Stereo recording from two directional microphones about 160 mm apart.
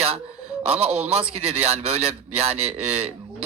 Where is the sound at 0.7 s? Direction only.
40° right (ahead or behind).